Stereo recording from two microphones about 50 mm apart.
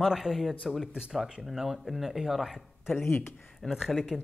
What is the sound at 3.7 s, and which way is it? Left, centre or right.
Speech, centre.